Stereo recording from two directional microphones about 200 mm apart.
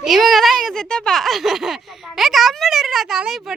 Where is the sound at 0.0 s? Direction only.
Centre (ahead or behind).